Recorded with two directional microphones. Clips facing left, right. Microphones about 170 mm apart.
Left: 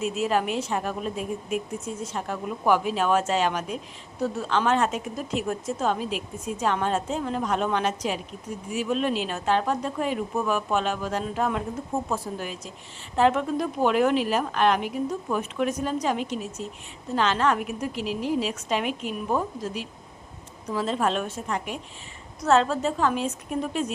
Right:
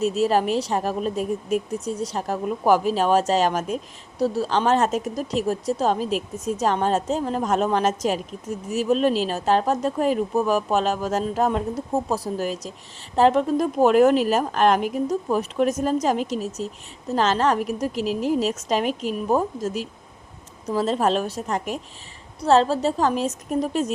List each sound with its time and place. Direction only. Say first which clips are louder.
0.0 s speech: right 5 dB; 35° right (ahead or behind)